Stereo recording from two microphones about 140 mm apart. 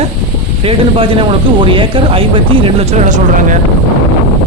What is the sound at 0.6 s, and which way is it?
Speech, 40° right (ahead or behind).